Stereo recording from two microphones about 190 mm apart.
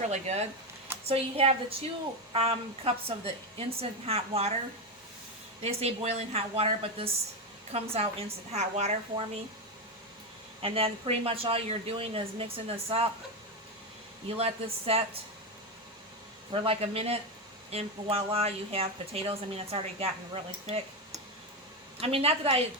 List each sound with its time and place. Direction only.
0.1 s speech: 35° right (ahead or behind)
5.6 s speech: 35° right (ahead or behind)
10.6 s speech: 30° right (ahead or behind)
14.3 s speech: 30° right (ahead or behind)
16.5 s speech: 30° right (ahead or behind)
22.0 s speech: 30° right (ahead or behind)